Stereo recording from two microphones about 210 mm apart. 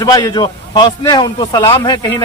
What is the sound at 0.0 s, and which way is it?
A man's voice, 15° left (ahead or behind).